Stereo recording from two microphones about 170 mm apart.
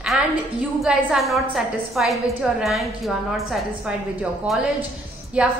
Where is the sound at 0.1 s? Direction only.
5° right (ahead or behind).